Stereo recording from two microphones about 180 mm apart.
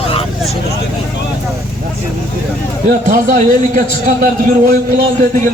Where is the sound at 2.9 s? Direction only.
50° right (ahead or behind).